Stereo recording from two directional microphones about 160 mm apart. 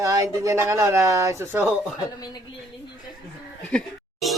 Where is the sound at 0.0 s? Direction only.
20° right (ahead or behind).